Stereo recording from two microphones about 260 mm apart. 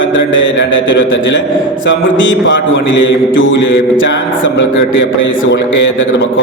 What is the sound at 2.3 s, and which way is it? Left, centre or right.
Music, left.